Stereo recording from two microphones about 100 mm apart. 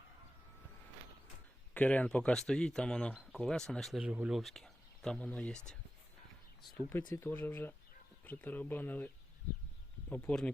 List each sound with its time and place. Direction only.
1.7 s speech: 15° left (ahead or behind)
4.0 s speech: 15° right (ahead or behind)
4.3 s speech: centre (ahead or behind)
6.7 s speech: 20° left (ahead or behind)
10.1 s speech: 20° left (ahead or behind)